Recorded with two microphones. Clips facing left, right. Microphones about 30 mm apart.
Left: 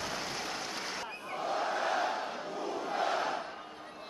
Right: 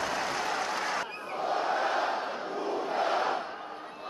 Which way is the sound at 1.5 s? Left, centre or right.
Right.